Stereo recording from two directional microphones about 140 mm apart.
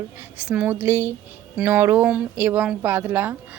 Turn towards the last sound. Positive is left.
turn(degrees=-15)  # may be behind; listen again after turning